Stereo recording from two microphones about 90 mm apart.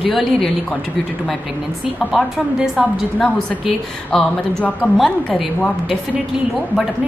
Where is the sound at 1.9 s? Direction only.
5° right (ahead or behind).